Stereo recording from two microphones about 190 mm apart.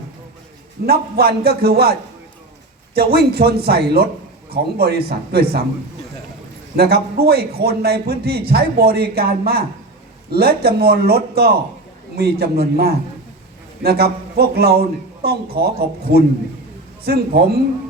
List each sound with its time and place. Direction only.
0.9 s speech: 55° right (ahead or behind)
6.7 s speech: 55° right (ahead or behind)